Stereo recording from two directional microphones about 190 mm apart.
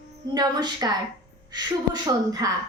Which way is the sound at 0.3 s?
20° right (ahead or behind).